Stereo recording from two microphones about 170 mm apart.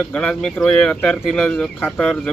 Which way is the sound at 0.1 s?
5° left (ahead or behind).